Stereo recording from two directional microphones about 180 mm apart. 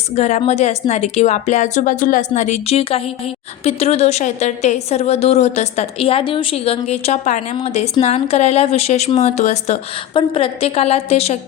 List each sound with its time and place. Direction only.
0.2 s a woman's voice: 40° left (ahead or behind)